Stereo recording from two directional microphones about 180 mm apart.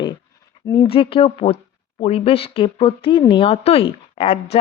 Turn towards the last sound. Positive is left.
turn(degrees=30)  # may be behind; listen again after turning